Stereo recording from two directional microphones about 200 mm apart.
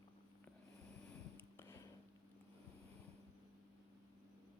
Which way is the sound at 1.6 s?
15° left (ahead or behind).